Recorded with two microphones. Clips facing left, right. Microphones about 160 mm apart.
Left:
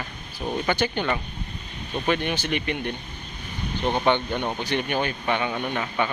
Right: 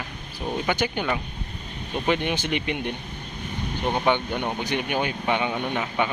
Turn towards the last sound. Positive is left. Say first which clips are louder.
# right 1 dB
turn(degrees=-10)  # may be behind; listen again after turning